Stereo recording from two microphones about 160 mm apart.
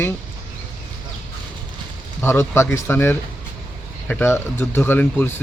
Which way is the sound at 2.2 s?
15° left (ahead or behind).